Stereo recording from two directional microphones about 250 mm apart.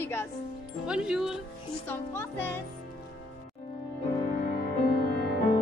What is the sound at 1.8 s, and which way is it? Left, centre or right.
Speech, centre.